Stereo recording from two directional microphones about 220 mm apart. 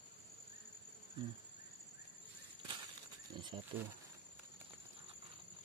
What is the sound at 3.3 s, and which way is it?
Cricket, 20° right (ahead or behind).